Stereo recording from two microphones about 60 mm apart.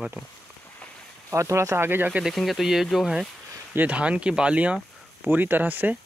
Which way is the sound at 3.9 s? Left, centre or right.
Centre.